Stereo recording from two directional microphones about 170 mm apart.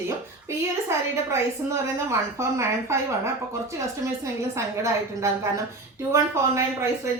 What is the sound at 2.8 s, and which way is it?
A woman's voice, 15° right (ahead or behind).